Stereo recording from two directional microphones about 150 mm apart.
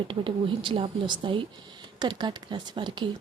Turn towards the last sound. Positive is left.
turn(degrees=-30)  # may be behind; listen again after turning